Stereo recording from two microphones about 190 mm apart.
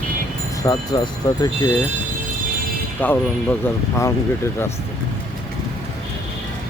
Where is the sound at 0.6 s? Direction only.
20° left (ahead or behind).